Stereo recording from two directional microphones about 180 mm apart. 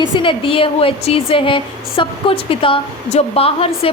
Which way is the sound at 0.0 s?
25° left (ahead or behind).